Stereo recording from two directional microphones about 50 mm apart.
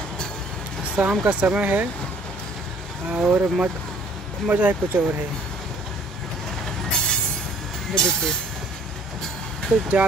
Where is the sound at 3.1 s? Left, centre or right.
Right.